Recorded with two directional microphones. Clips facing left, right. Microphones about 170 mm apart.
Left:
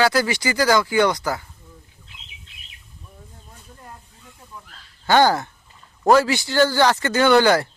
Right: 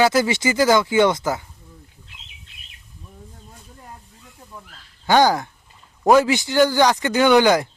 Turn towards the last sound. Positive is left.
turn(degrees=-15)  # may be behind; listen again after turning